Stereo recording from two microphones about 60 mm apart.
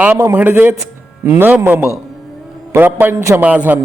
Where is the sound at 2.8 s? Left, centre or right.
Right.